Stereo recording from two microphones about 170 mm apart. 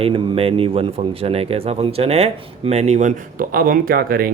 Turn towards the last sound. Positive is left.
turn(degrees=-60)  # may be behind; listen again after turning